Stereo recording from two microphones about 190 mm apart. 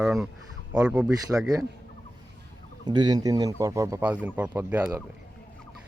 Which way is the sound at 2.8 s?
20° right (ahead or behind).